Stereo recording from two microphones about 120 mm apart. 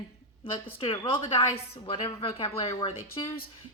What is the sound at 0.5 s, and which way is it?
A woman's voice, 45° left (ahead or behind).